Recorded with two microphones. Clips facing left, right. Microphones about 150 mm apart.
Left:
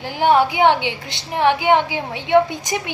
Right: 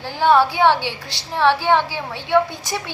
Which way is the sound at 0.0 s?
15° left (ahead or behind).